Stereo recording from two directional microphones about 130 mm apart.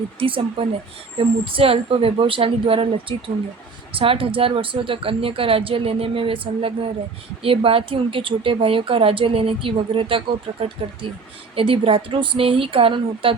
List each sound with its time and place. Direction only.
0.2 s speech: 45° right (ahead or behind)